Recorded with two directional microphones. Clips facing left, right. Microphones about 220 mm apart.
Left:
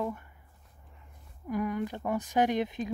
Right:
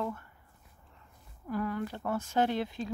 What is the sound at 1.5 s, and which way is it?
Speech, 15° left (ahead or behind).